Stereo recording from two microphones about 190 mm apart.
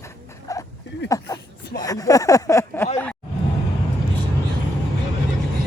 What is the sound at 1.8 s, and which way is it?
Speech, 20° left (ahead or behind).